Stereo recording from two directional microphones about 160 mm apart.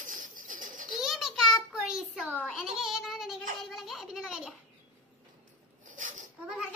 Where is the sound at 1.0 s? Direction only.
Centre (ahead or behind).